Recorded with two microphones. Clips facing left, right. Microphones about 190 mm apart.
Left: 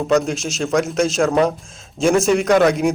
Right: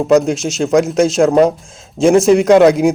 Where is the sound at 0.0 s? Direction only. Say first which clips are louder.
Right 6 dB; 30° right (ahead or behind).